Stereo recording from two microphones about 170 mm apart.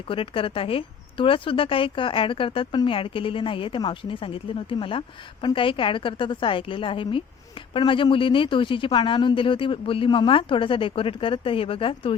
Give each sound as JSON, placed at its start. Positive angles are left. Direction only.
{"t": 0.1, "sound": "a woman's voice", "side_deg": 30}